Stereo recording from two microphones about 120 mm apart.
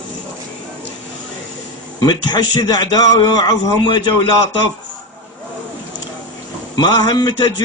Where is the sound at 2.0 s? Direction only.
35° left (ahead or behind).